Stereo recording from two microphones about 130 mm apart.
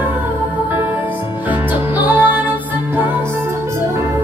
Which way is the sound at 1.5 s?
15° right (ahead or behind).